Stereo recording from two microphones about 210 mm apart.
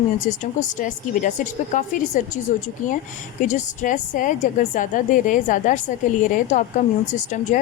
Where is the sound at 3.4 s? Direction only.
35° left (ahead or behind).